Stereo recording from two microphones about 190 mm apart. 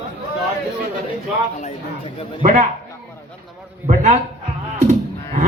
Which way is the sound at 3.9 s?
35° right (ahead or behind).